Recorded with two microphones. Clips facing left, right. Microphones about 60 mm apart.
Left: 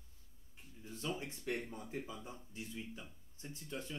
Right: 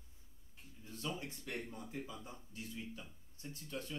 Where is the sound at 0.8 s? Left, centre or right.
Left.